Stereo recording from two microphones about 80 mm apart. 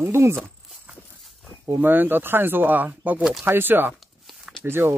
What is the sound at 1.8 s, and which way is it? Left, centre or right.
Speech, right.